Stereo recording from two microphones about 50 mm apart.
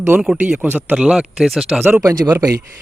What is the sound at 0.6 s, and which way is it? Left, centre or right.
Speech, right.